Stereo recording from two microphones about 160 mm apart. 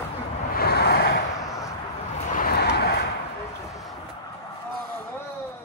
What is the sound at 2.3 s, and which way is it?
Vehicle, 75° left (ahead or behind).